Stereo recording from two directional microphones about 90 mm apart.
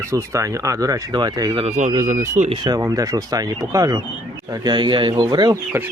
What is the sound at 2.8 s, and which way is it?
Speech, 40° right (ahead or behind).